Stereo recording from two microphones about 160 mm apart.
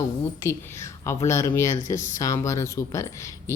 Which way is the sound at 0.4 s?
15° left (ahead or behind).